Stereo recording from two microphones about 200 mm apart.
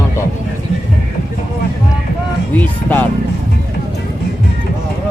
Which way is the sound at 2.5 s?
10° left (ahead or behind).